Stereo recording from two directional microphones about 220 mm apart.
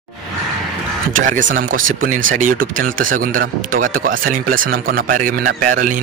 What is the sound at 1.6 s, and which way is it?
Speech, 40° right (ahead or behind).